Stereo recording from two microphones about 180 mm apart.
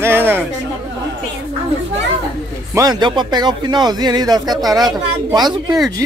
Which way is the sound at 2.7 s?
20° right (ahead or behind).